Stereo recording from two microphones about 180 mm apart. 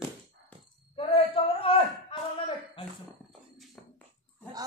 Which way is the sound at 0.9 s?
30° left (ahead or behind).